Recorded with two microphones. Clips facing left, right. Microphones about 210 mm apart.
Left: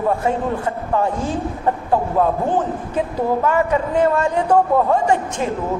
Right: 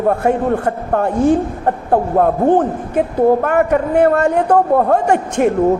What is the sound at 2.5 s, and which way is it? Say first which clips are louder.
A woman's voice: right 5 dB; 60° right (ahead or behind).